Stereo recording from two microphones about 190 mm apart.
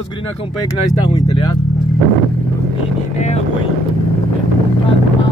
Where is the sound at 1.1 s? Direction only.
25° left (ahead or behind).